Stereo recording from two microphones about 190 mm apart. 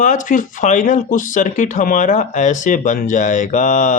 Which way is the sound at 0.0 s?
40° left (ahead or behind).